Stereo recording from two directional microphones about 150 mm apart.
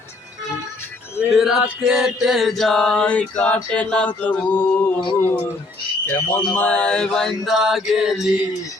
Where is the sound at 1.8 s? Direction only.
5° right (ahead or behind); by 4.9 s 15° left (ahead or behind).